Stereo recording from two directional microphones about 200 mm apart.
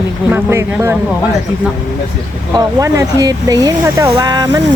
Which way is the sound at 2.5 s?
15° right (ahead or behind).